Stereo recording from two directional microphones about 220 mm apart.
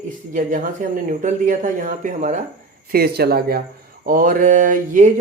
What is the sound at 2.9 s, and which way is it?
Speech, 45° right (ahead or behind).